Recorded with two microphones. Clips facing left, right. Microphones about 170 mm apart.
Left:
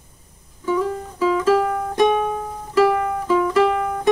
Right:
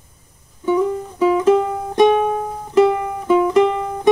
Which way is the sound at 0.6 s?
20° right (ahead or behind).